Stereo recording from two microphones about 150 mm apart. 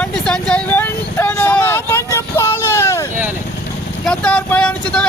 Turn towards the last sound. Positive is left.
turn(degrees=10)  # may be behind; listen again after turning